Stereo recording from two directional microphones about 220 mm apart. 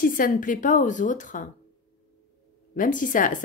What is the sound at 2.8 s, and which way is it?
Speech, 35° left (ahead or behind).